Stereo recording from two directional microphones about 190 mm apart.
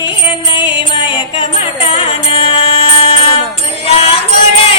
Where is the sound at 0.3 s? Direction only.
25° left (ahead or behind).